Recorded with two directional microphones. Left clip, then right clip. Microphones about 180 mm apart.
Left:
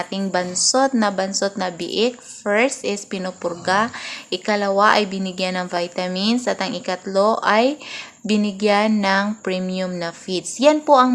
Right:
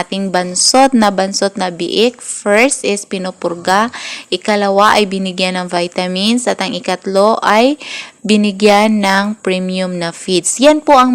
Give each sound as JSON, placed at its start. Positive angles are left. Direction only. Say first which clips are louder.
{"t": 0.2, "sound": "a woman's voice", "louder": "right 6 dB", "side_deg": -35}